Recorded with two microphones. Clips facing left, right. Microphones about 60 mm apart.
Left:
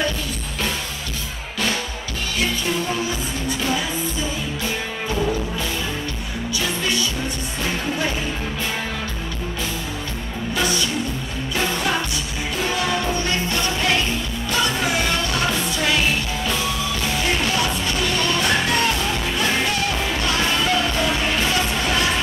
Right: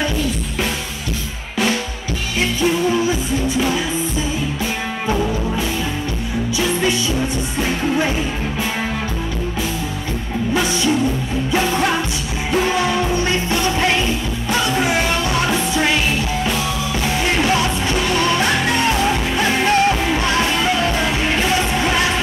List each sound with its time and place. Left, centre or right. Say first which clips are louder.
6.5 s music: right 5 dB; right
10.5 s music: right 3 dB; right
13.1 s music: right 4 dB; centre
17.4 s music: right 4 dB; right